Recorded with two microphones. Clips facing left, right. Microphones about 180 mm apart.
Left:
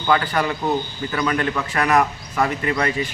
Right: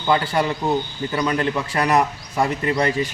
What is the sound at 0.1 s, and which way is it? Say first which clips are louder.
A man's voice: even; 25° right (ahead or behind).